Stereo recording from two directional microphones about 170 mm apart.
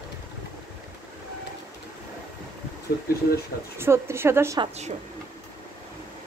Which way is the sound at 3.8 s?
15° right (ahead or behind).